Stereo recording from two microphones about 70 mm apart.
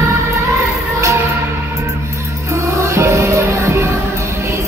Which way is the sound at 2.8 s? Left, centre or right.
Right.